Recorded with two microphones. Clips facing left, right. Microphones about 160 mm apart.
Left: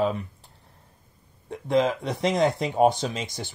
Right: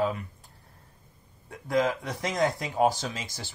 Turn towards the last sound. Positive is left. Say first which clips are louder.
# left 4 dB
turn(degrees=20)  # may be behind; listen again after turning